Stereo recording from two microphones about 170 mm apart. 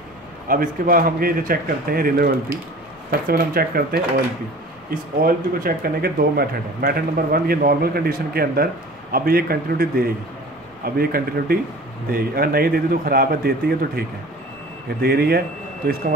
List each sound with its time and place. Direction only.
0.5 s speech: 55° right (ahead or behind)
5.2 s speech: 60° right (ahead or behind)